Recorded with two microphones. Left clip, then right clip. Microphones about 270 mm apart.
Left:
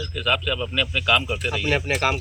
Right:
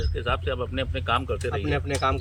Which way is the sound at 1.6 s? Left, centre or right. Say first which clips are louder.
Left 6 dB; centre.